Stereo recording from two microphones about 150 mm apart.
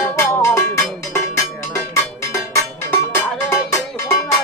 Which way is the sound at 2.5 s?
15° left (ahead or behind).